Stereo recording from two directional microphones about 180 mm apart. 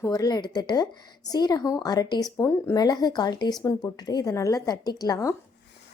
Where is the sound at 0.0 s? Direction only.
20° left (ahead or behind).